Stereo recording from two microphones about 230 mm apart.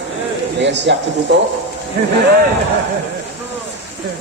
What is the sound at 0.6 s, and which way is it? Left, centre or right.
Speech, right.